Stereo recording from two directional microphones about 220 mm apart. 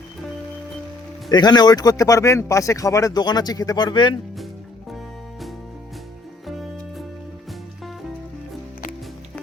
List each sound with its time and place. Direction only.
1.3 s speech: 20° left (ahead or behind)